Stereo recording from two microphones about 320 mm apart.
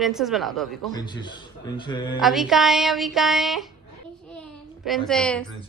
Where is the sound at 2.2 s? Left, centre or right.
Centre.